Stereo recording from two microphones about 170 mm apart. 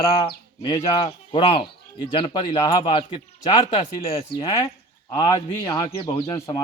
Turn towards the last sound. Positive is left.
turn(degrees=20)  # may be behind; listen again after turning